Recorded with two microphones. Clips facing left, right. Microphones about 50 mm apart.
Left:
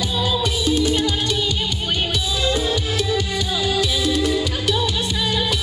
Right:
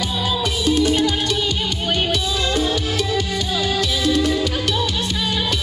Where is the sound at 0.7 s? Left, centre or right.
Right.